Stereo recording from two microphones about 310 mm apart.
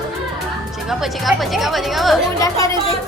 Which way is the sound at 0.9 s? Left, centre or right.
Centre.